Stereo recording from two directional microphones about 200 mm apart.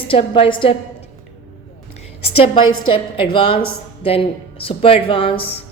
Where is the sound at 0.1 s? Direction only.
30° left (ahead or behind).